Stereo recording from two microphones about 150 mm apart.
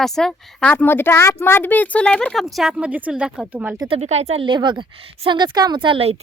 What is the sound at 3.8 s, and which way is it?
A woman's voice, 40° right (ahead or behind).